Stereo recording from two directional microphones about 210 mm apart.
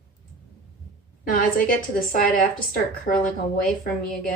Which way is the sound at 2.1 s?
40° left (ahead or behind).